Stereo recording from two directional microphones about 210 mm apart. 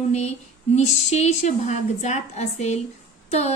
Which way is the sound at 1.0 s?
30° left (ahead or behind).